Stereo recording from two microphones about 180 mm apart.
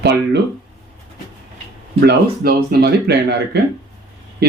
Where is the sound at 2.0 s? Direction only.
60° right (ahead or behind).